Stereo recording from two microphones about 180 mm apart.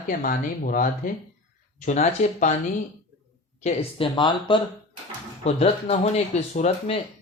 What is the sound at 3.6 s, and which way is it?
Speech, 35° left (ahead or behind).